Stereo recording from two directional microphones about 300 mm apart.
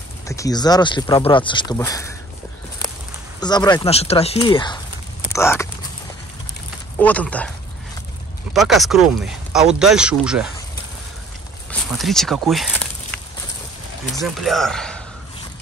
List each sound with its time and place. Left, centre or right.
0.3 s speech: centre
3.3 s speech: centre
7.0 s speech: centre
8.5 s speech: centre
11.7 s speech: centre
14.2 s speech: centre